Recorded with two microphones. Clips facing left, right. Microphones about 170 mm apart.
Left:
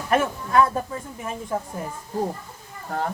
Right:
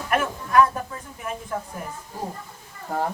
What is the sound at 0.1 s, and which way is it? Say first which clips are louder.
Speech: left 2 dB; 25° left (ahead or behind).